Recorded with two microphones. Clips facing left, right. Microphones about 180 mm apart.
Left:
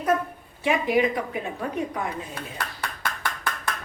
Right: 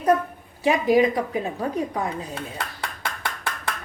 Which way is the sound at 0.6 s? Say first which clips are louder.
Right 4 dB; 35° right (ahead or behind).